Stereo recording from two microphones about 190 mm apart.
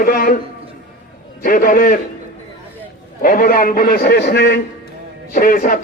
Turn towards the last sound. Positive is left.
turn(degrees=45)  # may be behind; listen again after turning